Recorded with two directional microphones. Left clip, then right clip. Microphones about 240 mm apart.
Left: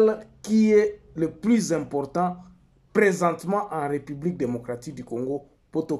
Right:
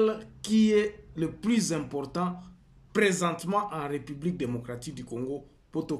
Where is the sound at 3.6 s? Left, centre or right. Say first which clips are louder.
Left 3 dB; centre.